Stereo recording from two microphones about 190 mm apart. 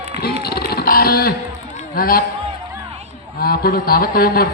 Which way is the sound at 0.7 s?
55° left (ahead or behind).